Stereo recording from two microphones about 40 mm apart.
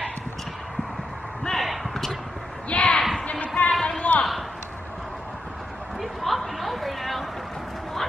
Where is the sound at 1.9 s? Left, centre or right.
Centre.